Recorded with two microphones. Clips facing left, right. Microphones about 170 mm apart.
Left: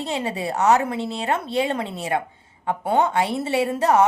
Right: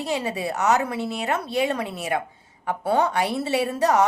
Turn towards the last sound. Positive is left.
turn(degrees=25)  # may be behind; listen again after turning